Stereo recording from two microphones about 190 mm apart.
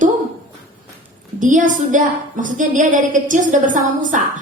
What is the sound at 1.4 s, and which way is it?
A woman's voice, 40° right (ahead or behind).